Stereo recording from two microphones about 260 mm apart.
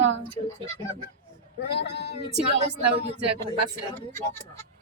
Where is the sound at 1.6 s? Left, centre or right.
Left.